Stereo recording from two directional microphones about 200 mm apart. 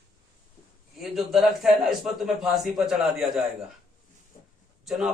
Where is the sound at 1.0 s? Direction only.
Centre (ahead or behind).